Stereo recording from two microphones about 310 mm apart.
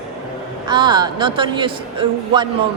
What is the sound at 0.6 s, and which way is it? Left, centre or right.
A man's voice, centre.